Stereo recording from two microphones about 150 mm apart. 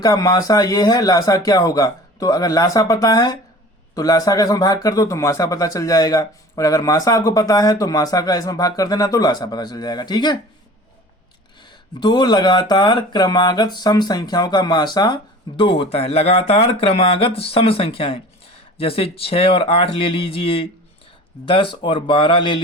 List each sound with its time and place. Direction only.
0.0 s speech: 25° left (ahead or behind)
11.6 s speech: 30° left (ahead or behind)